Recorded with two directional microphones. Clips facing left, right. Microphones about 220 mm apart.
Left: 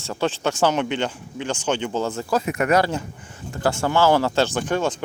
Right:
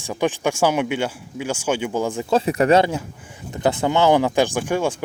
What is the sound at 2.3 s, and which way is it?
Speech, 30° right (ahead or behind).